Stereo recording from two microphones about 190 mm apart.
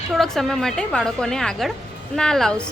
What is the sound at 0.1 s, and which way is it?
A woman's voice, centre (ahead or behind).